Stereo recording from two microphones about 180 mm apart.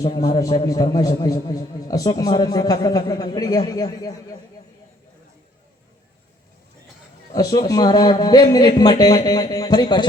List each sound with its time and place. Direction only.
0.2 s a man's voice: 20° left (ahead or behind)
7.3 s a man's voice: 20° left (ahead or behind)